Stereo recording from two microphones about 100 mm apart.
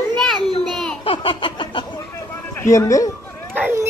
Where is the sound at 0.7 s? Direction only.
Centre (ahead or behind).